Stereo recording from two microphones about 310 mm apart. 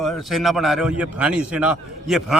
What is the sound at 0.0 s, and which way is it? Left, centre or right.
A man's voice, centre.